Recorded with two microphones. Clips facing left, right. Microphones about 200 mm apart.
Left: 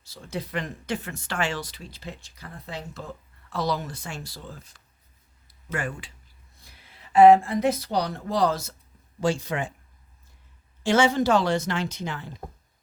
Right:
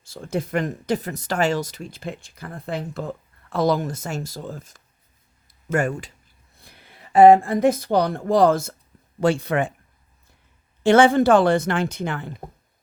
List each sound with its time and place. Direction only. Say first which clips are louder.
0.1 s speech: right 7 dB; 50° right (ahead or behind)
7.3 s a woman's voice: right 5 dB; 50° right (ahead or behind)
10.8 s a woman's voice: right 6 dB; 55° right (ahead or behind)